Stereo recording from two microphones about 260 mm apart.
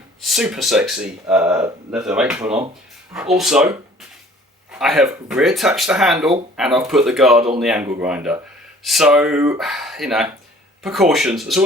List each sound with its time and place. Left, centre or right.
0.2 s speech: centre
4.7 s speech: centre